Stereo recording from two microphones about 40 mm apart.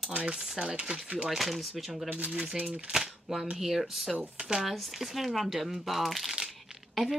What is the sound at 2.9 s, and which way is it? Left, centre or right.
A woman's voice, centre.